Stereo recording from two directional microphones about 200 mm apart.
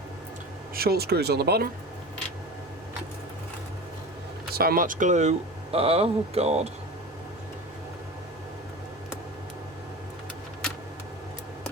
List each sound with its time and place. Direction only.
0.8 s speech: 50° right (ahead or behind)
4.5 s speech: 45° right (ahead or behind); by 6.6 s 30° right (ahead or behind)